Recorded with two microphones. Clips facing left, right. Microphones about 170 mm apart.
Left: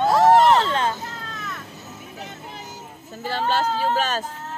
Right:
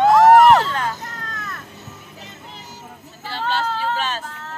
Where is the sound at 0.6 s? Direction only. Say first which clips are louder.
Left 2 dB; 25° left (ahead or behind).